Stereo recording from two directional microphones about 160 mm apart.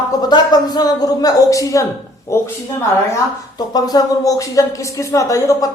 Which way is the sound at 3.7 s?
25° left (ahead or behind).